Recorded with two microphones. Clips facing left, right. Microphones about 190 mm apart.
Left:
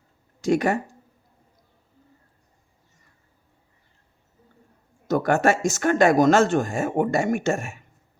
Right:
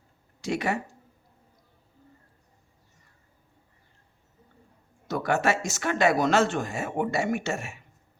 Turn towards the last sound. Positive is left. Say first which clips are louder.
# left 5 dB
turn(degrees=45)  # may be behind; listen again after turning